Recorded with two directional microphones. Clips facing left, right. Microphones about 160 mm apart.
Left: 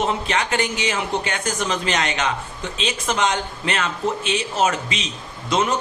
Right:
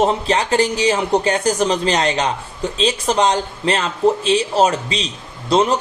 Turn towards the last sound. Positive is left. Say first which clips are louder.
# right 6 dB
turn(degrees=-35)  # may be behind; listen again after turning